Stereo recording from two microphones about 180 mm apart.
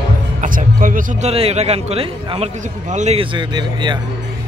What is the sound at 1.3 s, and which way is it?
A man's voice, 35° right (ahead or behind).